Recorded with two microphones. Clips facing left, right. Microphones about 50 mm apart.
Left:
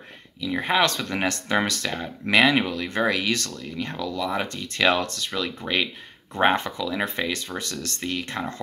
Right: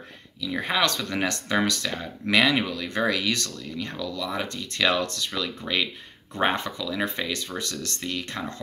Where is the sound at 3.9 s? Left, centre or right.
Centre.